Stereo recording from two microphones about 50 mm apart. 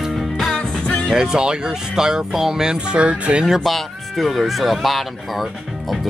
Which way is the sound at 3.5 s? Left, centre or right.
Centre.